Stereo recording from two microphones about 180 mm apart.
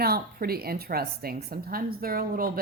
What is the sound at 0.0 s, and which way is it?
A woman's voice, 55° right (ahead or behind).